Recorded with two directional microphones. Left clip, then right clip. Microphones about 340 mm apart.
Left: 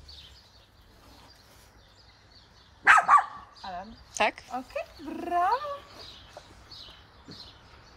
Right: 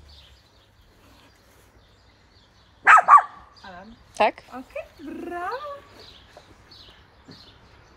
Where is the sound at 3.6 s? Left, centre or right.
Left.